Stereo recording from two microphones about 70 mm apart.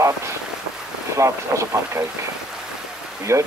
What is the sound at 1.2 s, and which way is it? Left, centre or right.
Speech, right.